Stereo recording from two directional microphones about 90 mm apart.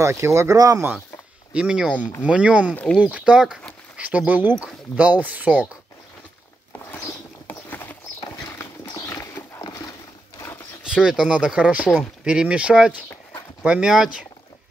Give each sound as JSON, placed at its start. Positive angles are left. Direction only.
{"t": 0.1, "sound": "speech", "side_deg": -30}
{"t": 1.5, "sound": "speech", "side_deg": -10}
{"t": 2.7, "sound": "speech", "side_deg": 15}
{"t": 3.0, "sound": "speech", "side_deg": -10}
{"t": 6.9, "sound": "a sound", "side_deg": 25}
{"t": 9.1, "sound": "dog", "side_deg": 35}
{"t": 10.9, "sound": "speech", "side_deg": -10}